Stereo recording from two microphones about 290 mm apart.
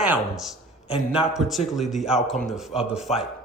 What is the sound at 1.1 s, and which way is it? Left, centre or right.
A man's voice, centre.